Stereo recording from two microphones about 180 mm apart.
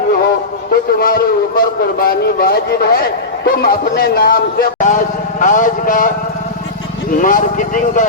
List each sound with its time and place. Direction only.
0.7 s a man's voice: 55° left (ahead or behind)
7.2 s speech: 50° left (ahead or behind)